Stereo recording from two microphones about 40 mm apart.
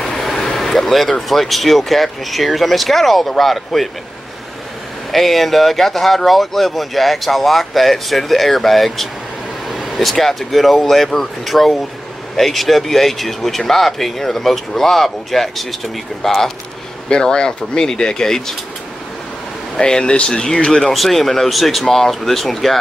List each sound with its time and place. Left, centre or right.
0.0 s vehicle: centre
1.3 s speech: centre
5.1 s speech: centre
17.1 s speech: left
19.8 s speech: centre
20.9 s speech: centre